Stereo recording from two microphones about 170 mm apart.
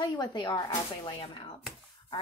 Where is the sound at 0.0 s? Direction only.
25° left (ahead or behind).